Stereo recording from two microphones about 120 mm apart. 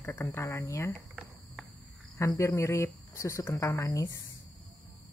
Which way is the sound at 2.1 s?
25° left (ahead or behind).